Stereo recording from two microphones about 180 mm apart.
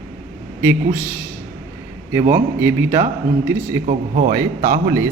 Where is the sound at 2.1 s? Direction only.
15° right (ahead or behind).